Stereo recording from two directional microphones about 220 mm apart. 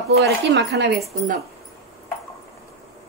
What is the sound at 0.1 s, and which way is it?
Speech, 45° right (ahead or behind).